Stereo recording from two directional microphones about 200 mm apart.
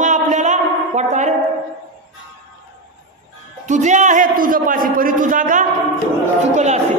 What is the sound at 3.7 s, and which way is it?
A man's voice, 35° right (ahead or behind).